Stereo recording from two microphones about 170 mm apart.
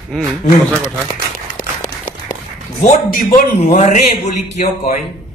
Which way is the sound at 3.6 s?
45° left (ahead or behind).